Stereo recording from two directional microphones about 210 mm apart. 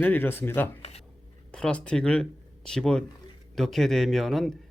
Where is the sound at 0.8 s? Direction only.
30° left (ahead or behind).